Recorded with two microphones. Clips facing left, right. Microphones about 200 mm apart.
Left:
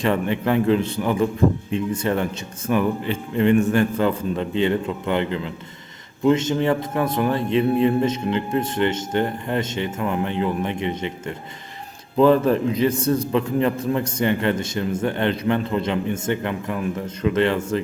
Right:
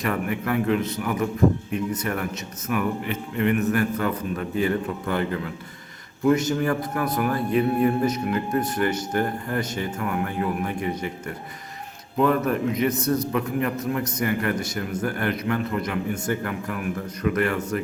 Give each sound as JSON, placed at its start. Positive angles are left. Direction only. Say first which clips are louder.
{"t": 0.0, "sound": "a man's voice", "louder": "left 5 dB", "side_deg": 25}